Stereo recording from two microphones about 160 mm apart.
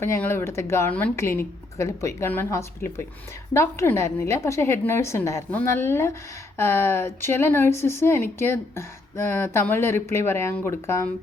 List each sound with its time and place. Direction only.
0.0 s speech: 15° left (ahead or behind)